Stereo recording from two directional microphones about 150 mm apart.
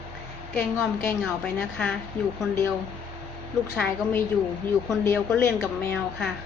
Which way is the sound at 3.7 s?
5° left (ahead or behind).